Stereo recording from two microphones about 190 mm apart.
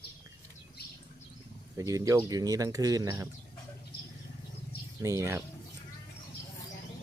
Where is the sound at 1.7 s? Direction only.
15° right (ahead or behind).